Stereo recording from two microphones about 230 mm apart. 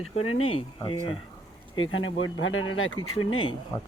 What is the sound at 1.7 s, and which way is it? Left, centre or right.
Speech, left.